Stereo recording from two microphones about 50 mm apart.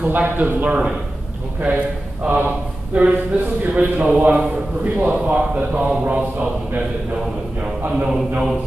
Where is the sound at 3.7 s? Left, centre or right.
Right.